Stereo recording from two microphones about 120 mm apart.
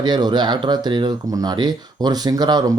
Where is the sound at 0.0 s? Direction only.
35° right (ahead or behind).